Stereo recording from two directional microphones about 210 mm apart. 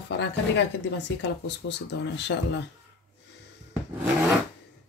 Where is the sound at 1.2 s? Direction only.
55° left (ahead or behind).